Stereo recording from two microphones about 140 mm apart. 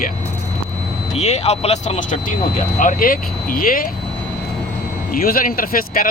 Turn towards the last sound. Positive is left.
turn(degrees=90)